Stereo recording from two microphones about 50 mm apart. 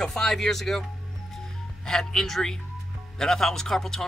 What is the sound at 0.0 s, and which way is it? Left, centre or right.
Speech, centre.